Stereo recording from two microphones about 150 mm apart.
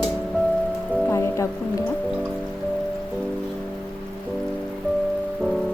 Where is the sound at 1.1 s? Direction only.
20° left (ahead or behind).